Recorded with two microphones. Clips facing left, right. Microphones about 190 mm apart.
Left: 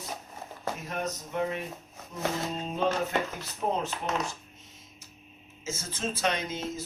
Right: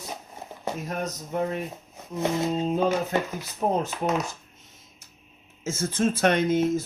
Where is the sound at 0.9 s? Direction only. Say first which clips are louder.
Right 3 dB; 40° right (ahead or behind).